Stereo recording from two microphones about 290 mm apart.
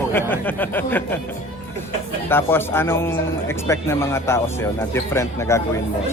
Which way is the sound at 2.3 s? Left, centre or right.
Centre.